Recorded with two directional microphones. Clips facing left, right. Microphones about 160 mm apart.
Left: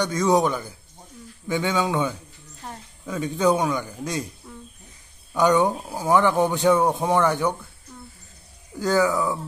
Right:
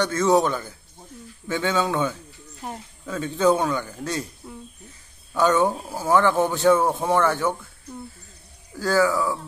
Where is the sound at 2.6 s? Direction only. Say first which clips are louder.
Right 4 dB; 15° right (ahead or behind).